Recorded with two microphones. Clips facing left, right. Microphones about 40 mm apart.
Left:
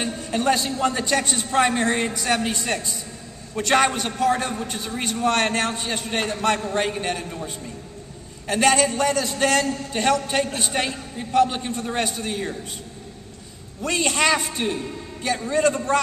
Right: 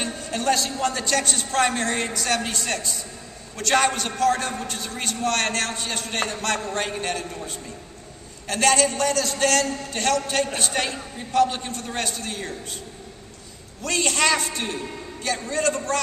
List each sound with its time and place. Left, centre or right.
0.0 s a sound: centre
0.7 s a man's voice: centre
13.8 s a man's voice: centre